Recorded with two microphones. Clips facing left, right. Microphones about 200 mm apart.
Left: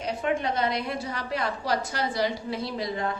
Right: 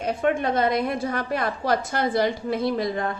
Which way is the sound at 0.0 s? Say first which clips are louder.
Right 4 dB; 50° right (ahead or behind).